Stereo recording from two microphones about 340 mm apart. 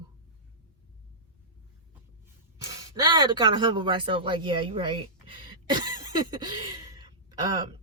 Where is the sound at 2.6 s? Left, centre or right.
Centre.